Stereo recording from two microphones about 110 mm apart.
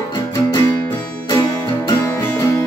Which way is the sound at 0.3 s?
35° left (ahead or behind).